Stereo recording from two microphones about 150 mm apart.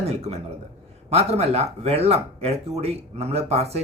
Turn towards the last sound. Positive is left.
turn(degrees=-45)  # may be behind; listen again after turning